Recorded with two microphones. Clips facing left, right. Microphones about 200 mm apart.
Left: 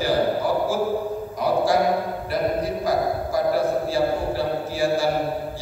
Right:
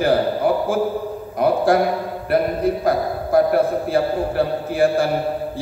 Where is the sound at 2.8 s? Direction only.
55° right (ahead or behind).